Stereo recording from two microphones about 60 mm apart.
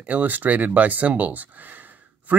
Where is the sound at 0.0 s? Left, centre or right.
Right.